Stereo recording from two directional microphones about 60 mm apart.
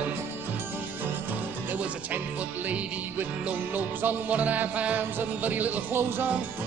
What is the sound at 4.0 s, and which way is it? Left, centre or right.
Music, right.